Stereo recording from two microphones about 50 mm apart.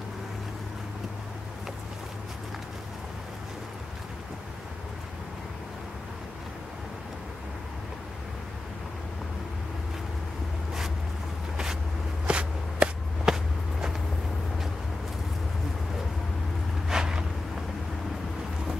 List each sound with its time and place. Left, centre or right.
12.3 s walk: right
13.2 s walk: centre
16.9 s a sound: centre